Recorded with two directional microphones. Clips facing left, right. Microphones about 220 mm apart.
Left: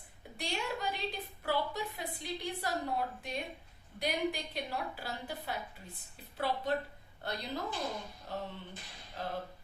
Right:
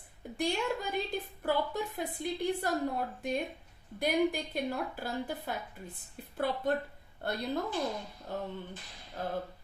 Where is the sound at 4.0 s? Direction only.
50° right (ahead or behind).